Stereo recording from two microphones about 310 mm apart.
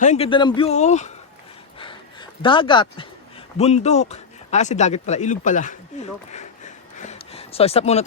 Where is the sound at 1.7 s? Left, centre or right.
Centre.